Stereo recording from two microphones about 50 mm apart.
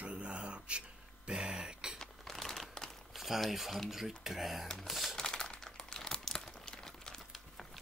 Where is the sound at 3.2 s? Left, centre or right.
Centre.